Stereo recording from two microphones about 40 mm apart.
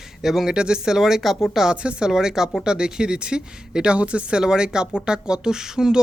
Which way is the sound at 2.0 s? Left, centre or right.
Centre.